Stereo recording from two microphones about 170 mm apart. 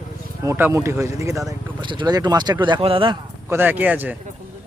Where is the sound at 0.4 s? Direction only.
15° right (ahead or behind); by 3.2 s 30° right (ahead or behind).